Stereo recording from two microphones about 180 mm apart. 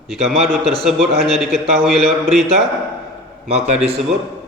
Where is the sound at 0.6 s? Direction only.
30° right (ahead or behind).